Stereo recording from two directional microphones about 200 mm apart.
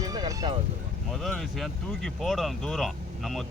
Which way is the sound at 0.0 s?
20° right (ahead or behind).